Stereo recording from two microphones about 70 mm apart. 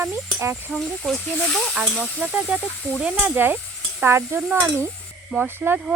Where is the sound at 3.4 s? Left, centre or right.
Right.